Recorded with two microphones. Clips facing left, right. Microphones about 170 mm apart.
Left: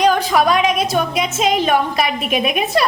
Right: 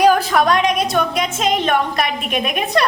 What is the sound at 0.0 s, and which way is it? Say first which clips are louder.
A woman's voice: right 1 dB; 5° right (ahead or behind).